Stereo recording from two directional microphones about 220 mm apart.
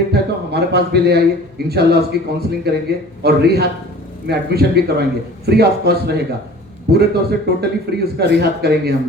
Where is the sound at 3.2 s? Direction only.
45° right (ahead or behind).